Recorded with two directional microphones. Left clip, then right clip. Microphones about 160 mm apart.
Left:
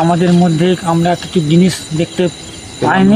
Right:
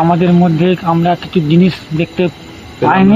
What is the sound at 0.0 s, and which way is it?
Speech, 15° left (ahead or behind).